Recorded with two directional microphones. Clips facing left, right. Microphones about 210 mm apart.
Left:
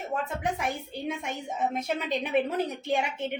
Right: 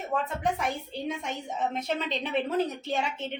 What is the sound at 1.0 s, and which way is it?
A woman's voice, 10° left (ahead or behind).